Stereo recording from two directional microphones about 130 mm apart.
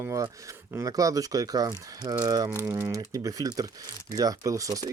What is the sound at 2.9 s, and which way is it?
Speech, 25° right (ahead or behind).